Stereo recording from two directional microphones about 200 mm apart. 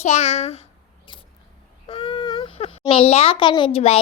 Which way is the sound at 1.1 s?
25° left (ahead or behind).